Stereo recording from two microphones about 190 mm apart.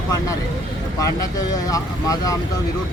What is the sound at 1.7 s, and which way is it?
Speech, 20° left (ahead or behind).